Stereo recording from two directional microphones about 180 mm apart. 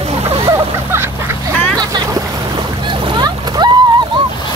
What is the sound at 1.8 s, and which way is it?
Boat, 20° right (ahead or behind).